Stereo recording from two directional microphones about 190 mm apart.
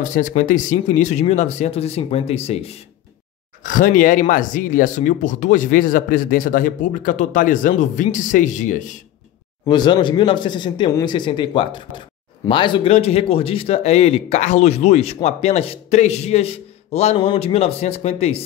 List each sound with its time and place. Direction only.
0.0 s a man's voice: 40° left (ahead or behind)
3.6 s speech: 45° left (ahead or behind)
9.7 s a man's voice: 25° left (ahead or behind)